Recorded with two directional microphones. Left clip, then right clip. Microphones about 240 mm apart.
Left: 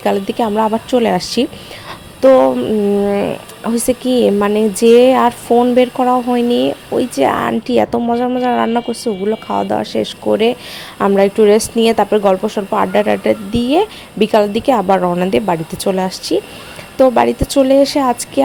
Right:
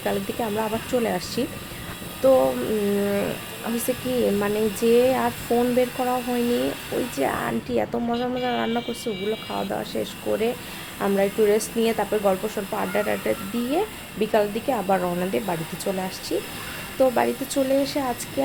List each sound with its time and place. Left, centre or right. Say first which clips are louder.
0.0 s a woman's voice: left 11 dB; left